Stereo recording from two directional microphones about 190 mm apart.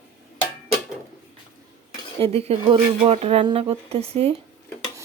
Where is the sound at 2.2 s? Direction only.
30° right (ahead or behind).